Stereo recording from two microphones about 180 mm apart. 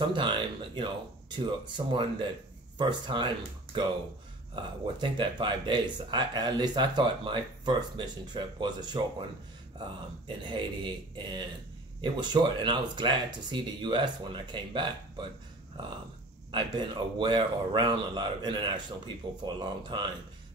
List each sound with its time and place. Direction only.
0.0 s speech: 25° right (ahead or behind)
4.6 s speech: 25° right (ahead or behind)
16.5 s speech: 25° right (ahead or behind)